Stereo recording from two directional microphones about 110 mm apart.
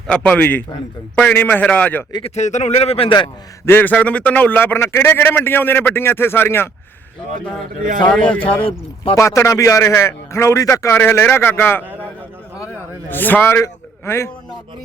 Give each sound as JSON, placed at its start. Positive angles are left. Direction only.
{"t": 0.1, "sound": "a man's voice", "side_deg": 10}
{"t": 2.2, "sound": "speech", "side_deg": 85}
{"t": 3.7, "sound": "a man's voice", "side_deg": 15}
{"t": 8.1, "sound": "a man's voice", "side_deg": 15}
{"t": 8.4, "sound": "speech", "side_deg": 55}
{"t": 9.1, "sound": "a man's voice", "side_deg": 25}
{"t": 13.1, "sound": "a man's voice", "side_deg": 15}